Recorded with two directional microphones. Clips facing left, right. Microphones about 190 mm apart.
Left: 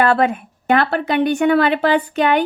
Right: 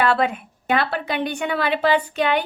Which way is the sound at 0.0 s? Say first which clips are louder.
Left 4 dB; 45° left (ahead or behind).